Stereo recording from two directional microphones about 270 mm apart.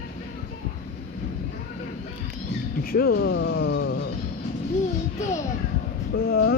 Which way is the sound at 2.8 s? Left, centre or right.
Left.